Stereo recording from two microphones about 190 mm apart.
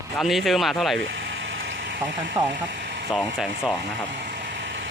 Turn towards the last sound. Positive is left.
turn(degrees=0)  # may be behind; listen again after turning